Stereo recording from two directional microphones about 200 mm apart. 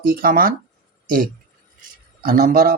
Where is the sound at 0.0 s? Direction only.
45° right (ahead or behind).